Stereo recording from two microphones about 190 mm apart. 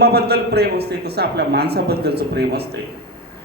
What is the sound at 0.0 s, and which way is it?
A man's voice, 60° right (ahead or behind).